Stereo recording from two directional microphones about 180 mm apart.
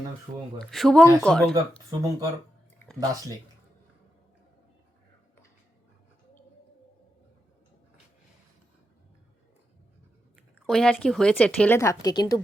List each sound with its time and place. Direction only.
0.3 s speech: 20° right (ahead or behind)
0.6 s speech: centre (ahead or behind)
1.9 s speech: 20° right (ahead or behind)
10.7 s speech: 5° left (ahead or behind); by 12.4 s 20° left (ahead or behind)